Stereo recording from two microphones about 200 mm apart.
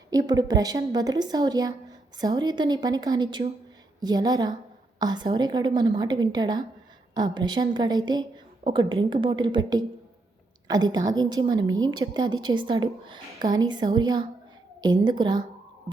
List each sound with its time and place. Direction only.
0.1 s a woman's voice: 20° right (ahead or behind)